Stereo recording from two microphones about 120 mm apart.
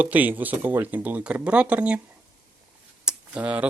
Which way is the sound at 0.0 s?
15° right (ahead or behind).